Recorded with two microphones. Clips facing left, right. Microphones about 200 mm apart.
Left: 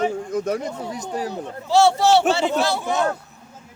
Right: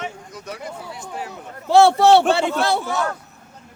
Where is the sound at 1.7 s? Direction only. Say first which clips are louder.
Right 3 dB; 55° right (ahead or behind).